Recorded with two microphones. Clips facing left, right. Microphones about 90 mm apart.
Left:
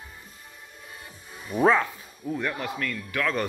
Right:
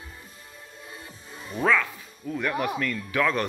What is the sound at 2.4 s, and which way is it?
Speech, centre (ahead or behind).